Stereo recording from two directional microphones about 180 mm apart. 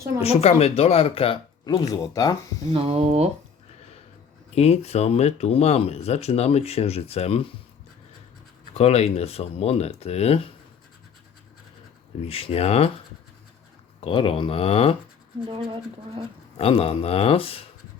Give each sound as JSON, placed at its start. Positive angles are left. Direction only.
{"t": 0.2, "sound": "speech", "side_deg": 35}
{"t": 2.7, "sound": "speech", "side_deg": -35}
{"t": 4.5, "sound": "speech", "side_deg": 35}
{"t": 8.7, "sound": "speech", "side_deg": 35}
{"t": 12.2, "sound": "speech", "side_deg": 30}
{"t": 14.0, "sound": "speech", "side_deg": 30}
{"t": 15.6, "sound": "speech", "side_deg": -25}
{"t": 16.6, "sound": "speech", "side_deg": 35}